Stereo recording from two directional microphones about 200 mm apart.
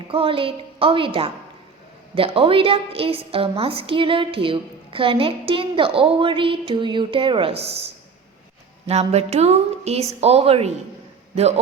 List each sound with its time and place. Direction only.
0.1 s a woman's voice: 25° right (ahead or behind)
8.9 s music: 30° right (ahead or behind)